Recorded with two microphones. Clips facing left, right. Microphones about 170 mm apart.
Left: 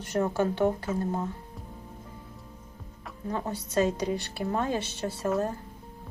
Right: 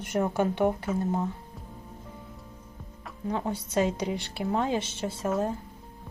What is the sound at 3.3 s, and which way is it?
A woman's voice, 15° right (ahead or behind).